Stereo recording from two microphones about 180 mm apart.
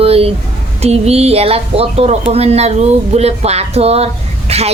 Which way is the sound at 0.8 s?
35° right (ahead or behind).